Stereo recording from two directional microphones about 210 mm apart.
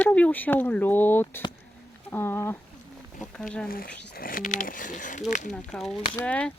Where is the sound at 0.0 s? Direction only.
5° left (ahead or behind).